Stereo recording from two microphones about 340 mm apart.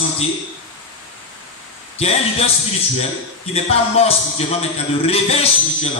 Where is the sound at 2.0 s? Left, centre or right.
Centre.